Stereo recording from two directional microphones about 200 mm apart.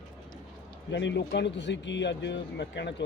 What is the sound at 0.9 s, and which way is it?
Speech, 60° left (ahead or behind).